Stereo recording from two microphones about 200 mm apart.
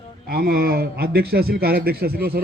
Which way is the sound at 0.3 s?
50° right (ahead or behind).